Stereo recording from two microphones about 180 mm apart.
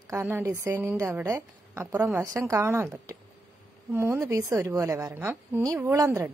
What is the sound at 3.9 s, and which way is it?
A woman's voice, 15° right (ahead or behind).